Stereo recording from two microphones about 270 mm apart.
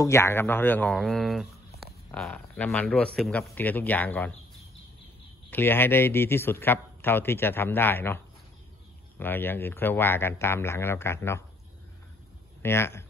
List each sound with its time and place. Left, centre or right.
0.0 s a man's voice: centre
5.5 s a man's voice: centre
9.2 s a man's voice: centre
12.6 s a man's voice: centre